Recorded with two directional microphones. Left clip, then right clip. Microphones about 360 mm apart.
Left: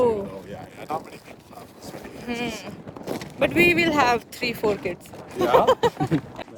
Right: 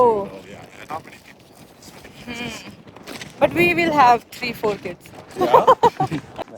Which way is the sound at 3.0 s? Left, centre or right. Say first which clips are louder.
Left 3 dB; centre.